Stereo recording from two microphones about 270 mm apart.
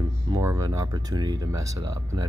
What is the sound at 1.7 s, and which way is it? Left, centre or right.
Speech, right.